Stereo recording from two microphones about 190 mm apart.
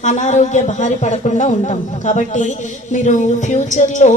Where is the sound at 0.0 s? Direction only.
40° left (ahead or behind).